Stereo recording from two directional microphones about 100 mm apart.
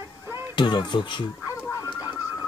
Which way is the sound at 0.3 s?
50° left (ahead or behind).